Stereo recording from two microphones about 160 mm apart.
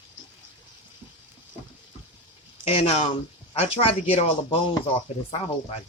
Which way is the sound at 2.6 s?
40° left (ahead or behind).